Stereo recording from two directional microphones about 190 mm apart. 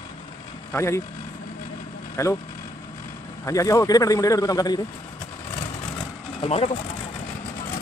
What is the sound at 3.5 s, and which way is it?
A man's voice, 15° left (ahead or behind).